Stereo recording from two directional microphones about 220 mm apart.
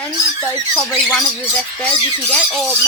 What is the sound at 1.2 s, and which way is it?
Speech, 5° left (ahead or behind).